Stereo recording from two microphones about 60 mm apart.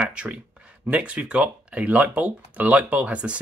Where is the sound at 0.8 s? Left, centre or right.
Right.